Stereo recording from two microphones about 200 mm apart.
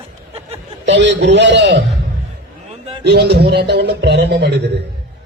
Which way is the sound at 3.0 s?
55° right (ahead or behind).